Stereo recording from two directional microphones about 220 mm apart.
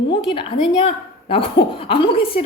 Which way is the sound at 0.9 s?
25° left (ahead or behind).